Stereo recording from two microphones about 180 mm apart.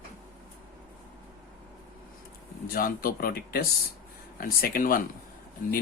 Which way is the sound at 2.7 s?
55° left (ahead or behind).